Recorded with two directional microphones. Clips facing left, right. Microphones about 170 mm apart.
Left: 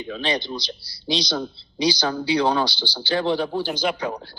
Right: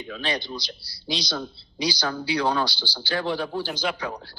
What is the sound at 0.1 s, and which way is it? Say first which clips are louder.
Speech: left 4 dB; 20° left (ahead or behind).